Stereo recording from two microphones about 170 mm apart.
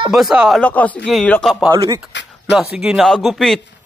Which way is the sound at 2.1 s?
90° left.